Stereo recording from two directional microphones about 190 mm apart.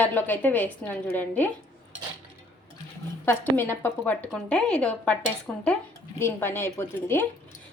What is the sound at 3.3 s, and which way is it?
A woman's voice, 10° left (ahead or behind).